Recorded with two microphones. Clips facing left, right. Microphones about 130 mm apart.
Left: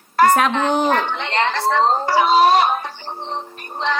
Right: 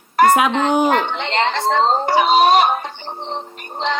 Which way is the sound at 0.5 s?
15° right (ahead or behind).